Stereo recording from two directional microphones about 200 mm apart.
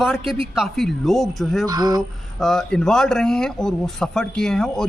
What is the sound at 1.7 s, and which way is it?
Speech, 20° right (ahead or behind).